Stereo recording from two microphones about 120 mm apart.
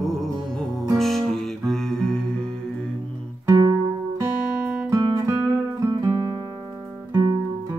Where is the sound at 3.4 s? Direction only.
35° right (ahead or behind).